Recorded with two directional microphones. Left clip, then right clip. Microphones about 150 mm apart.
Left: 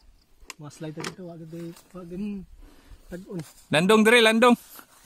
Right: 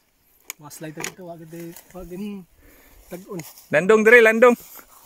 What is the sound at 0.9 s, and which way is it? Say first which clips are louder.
Speech: right 4 dB; 50° right (ahead or behind).